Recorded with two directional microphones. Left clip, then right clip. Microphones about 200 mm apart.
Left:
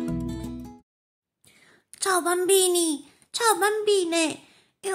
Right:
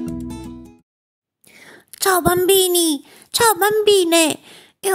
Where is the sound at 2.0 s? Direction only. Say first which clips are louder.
Right 8 dB; 35° right (ahead or behind).